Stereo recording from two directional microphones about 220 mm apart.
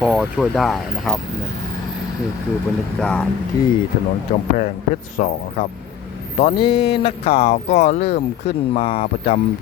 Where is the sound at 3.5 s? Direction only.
15° left (ahead or behind).